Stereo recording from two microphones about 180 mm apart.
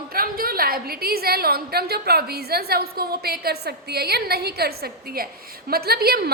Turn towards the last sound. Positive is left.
turn(degrees=-60)  # may be behind; listen again after turning